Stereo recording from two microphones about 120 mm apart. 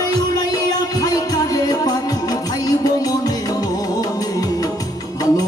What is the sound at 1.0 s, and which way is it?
Music, 30° left (ahead or behind).